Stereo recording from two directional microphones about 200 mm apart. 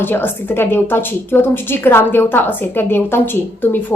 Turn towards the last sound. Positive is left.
turn(degrees=10)  # may be behind; listen again after turning